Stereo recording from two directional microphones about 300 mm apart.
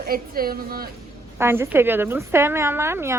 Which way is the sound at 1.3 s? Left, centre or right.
Centre.